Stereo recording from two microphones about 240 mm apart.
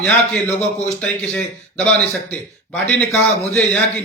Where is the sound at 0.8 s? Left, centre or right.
Centre.